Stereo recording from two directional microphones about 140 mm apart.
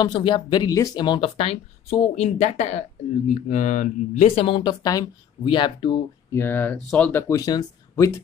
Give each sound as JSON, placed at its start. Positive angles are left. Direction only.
{"t": 0.0, "sound": "speech", "side_deg": 30}
{"t": 1.4, "sound": "speech", "side_deg": 45}
{"t": 4.4, "sound": "speech", "side_deg": 35}
{"t": 6.3, "sound": "speech", "side_deg": 15}